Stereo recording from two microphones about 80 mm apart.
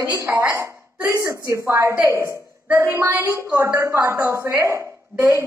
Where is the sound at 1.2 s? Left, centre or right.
Right.